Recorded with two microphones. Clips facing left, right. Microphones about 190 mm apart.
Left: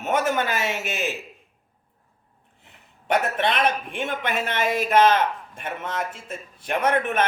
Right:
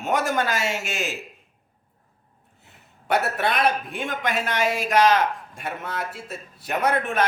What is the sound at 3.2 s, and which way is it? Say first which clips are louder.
Speech: even; 5° right (ahead or behind).